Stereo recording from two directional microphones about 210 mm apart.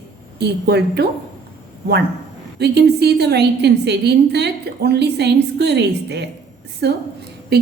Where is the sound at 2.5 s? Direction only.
50° right (ahead or behind).